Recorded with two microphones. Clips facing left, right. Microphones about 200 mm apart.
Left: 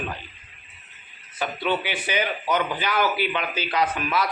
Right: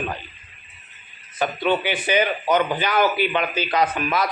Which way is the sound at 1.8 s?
50° right (ahead or behind).